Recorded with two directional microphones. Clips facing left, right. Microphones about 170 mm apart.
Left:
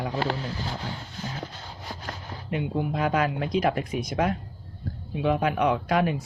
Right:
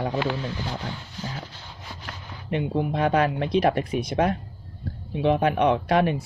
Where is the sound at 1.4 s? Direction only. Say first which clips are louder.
Left 4 dB; 40° left (ahead or behind).